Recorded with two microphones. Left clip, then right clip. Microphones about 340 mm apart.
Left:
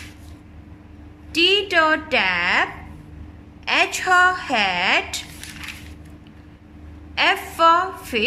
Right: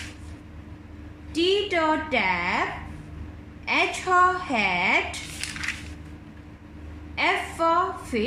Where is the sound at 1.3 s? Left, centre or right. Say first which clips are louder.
Left 6 dB; left.